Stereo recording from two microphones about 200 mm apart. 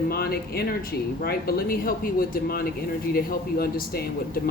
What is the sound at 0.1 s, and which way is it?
Speech, 50° left (ahead or behind).